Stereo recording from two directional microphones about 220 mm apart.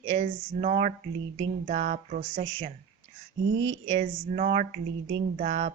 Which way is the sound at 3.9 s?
30° right (ahead or behind).